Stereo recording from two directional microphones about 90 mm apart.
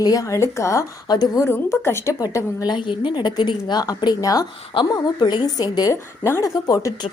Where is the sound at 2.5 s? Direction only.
55° left (ahead or behind).